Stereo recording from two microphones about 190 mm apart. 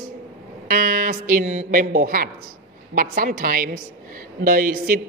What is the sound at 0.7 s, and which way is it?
A woman's voice, 50° right (ahead or behind).